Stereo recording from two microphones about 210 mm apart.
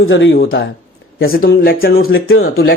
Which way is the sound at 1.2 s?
45° left (ahead or behind).